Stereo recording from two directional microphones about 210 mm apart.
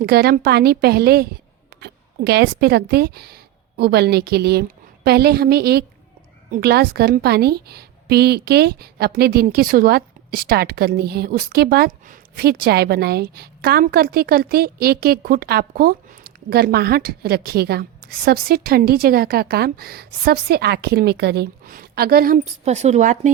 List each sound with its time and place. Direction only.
0.0 s a woman's voice: 50° right (ahead or behind)